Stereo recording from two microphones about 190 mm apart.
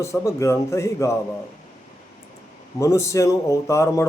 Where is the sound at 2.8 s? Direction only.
15° left (ahead or behind).